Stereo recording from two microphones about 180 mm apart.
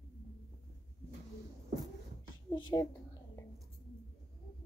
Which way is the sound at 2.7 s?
25° left (ahead or behind).